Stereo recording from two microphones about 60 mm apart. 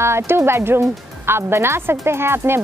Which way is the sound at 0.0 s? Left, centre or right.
Right.